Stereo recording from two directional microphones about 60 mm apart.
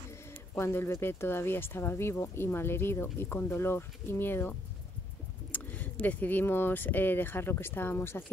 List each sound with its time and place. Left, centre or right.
0.6 s speech: left
5.5 s a sound: left
6.4 s speech: left